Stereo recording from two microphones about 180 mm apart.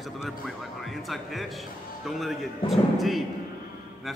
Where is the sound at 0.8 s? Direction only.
Centre (ahead or behind).